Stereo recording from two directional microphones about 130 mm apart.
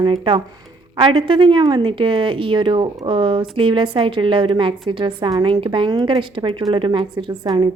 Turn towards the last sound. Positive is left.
turn(degrees=-35)  # may be behind; listen again after turning